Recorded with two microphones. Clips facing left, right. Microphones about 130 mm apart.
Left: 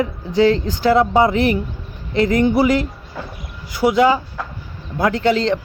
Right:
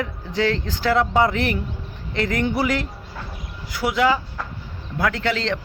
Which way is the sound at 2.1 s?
35° left (ahead or behind).